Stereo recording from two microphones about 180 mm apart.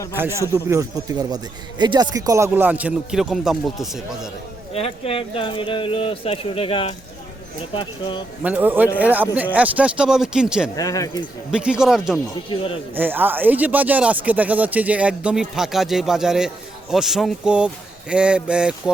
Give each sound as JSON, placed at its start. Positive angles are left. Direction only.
{"t": 0.2, "sound": "speech", "side_deg": -15}
{"t": 4.7, "sound": "speech", "side_deg": 35}
{"t": 8.4, "sound": "speech", "side_deg": -10}
{"t": 10.8, "sound": "speech", "side_deg": 20}
{"t": 11.5, "sound": "speech", "side_deg": -5}